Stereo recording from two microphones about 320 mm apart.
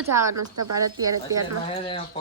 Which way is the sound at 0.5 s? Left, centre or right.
Right.